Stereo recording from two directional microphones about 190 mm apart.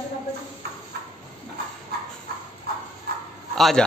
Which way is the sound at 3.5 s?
Centre (ahead or behind).